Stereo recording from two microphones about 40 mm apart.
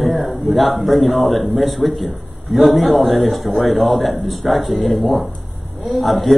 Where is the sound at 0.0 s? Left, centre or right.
Centre.